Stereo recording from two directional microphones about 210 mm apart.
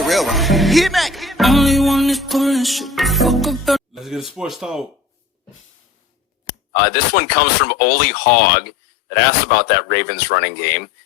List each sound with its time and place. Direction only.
0.0 s music: centre (ahead or behind)
4.4 s speech: centre (ahead or behind)
6.7 s speech: 50° left (ahead or behind)